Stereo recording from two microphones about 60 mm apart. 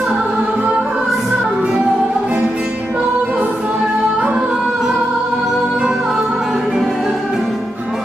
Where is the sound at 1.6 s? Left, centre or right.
Right.